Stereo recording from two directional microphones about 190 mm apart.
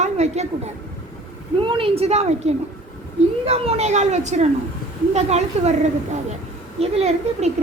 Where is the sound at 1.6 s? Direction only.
25° right (ahead or behind).